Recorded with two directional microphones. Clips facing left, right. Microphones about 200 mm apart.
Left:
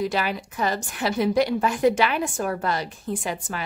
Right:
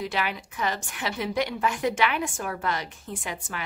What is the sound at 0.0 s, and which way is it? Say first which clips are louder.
A woman's voice: left 5 dB; 40° left (ahead or behind).